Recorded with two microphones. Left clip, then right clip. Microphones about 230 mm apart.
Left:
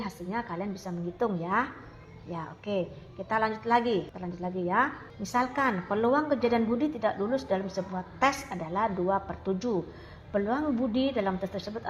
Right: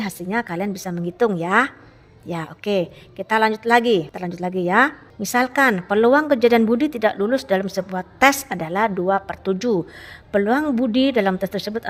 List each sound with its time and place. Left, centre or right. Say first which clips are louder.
0.0 s a woman's voice: right 10 dB; right